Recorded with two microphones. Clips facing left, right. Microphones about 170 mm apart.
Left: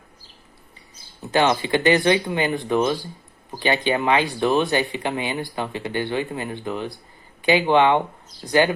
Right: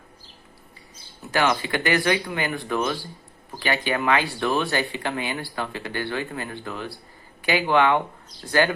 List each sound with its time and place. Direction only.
1.2 s speech: 20° left (ahead or behind)